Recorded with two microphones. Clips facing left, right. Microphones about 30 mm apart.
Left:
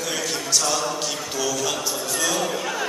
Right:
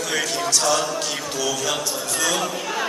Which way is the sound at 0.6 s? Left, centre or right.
Centre.